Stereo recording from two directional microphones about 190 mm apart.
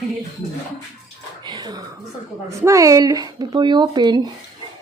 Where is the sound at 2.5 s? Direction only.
15° right (ahead or behind).